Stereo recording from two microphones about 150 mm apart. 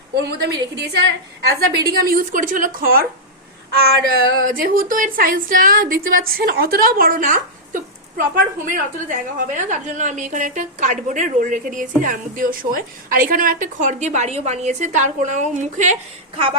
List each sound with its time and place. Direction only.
0.2 s a woman's voice: 90° right
1.9 s speech: 80° right
3.8 s a woman's voice: 90° right; by 16.0 s 55° right (ahead or behind)